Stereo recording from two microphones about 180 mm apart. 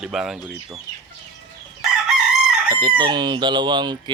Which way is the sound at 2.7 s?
20° right (ahead or behind).